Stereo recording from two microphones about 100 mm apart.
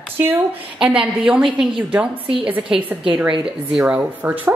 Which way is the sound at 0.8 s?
10° right (ahead or behind).